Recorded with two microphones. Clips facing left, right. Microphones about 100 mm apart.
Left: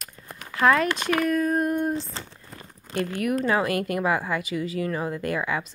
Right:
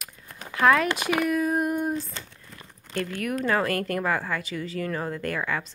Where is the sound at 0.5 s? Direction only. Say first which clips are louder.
Even; centre (ahead or behind).